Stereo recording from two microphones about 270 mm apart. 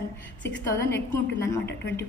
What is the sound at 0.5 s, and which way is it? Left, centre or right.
Speech, centre.